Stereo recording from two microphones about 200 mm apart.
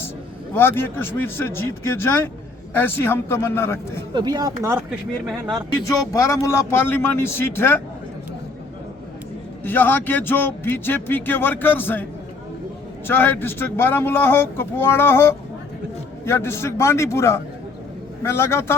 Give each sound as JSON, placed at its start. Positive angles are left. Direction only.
{"t": 0.5, "sound": "speech", "side_deg": 10}
{"t": 4.1, "sound": "speech", "side_deg": -20}
{"t": 6.1, "sound": "speech", "side_deg": 15}
{"t": 9.6, "sound": "speech", "side_deg": 10}
{"t": 13.1, "sound": "speech", "side_deg": 10}